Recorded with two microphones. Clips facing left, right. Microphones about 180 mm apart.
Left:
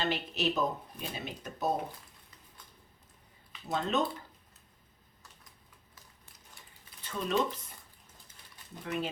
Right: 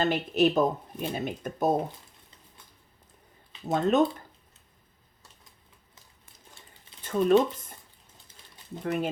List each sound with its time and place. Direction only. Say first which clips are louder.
0.0 s speech: right 8 dB; 50° right (ahead or behind)
3.6 s speech: right 8 dB; 50° right (ahead or behind)
7.0 s a sound: right 12 dB; 50° right (ahead or behind)
8.8 s speech: right 6 dB; 50° right (ahead or behind)